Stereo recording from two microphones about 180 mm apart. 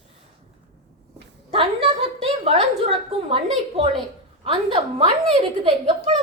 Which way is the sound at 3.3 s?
30° right (ahead or behind).